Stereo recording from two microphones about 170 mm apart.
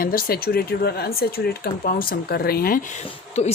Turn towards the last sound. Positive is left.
turn(degrees=40)  # may be behind; listen again after turning